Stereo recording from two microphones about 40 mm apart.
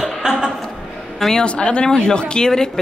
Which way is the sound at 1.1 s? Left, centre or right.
Centre.